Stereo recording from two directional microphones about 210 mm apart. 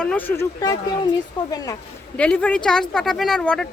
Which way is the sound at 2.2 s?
5° left (ahead or behind).